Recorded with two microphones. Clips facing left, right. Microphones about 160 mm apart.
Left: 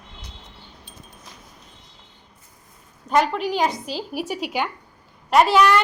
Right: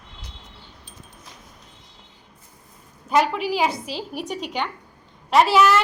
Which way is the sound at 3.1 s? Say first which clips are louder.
Even; 5° right (ahead or behind).